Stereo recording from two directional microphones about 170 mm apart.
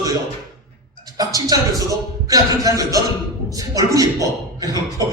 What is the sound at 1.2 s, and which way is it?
A man's voice, 20° right (ahead or behind).